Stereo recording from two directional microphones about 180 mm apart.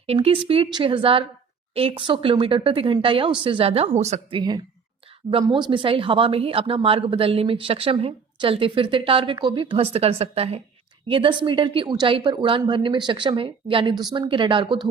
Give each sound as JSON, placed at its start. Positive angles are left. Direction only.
{"t": 0.1, "sound": "a woman's voice", "side_deg": -30}